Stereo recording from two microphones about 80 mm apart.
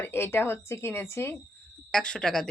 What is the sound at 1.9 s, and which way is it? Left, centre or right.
Speech, centre.